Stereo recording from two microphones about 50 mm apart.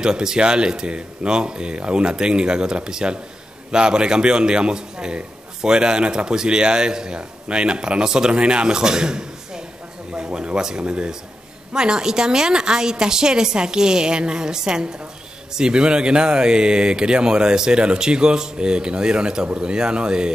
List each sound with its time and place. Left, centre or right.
0.0 s a man's voice: centre